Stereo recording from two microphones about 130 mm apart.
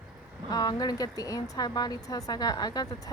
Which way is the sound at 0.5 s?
30° left (ahead or behind).